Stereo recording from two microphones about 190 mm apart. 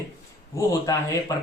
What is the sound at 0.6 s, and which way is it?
Speech, 15° left (ahead or behind).